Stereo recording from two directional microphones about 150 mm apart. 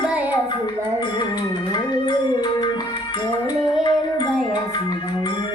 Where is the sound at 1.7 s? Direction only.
30° left (ahead or behind).